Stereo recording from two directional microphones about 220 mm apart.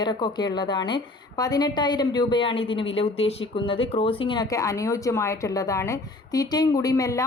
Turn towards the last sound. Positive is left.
turn(degrees=15)  # may be behind; listen again after turning